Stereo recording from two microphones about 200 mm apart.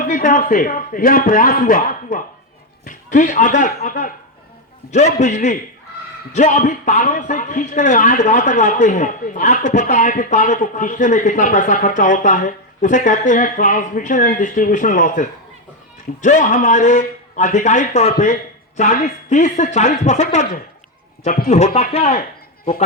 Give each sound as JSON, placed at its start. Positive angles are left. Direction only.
{"t": 0.0, "sound": "speech", "side_deg": 40}
{"t": 21.2, "sound": "speech", "side_deg": 50}
{"t": 21.5, "sound": "speech", "side_deg": 35}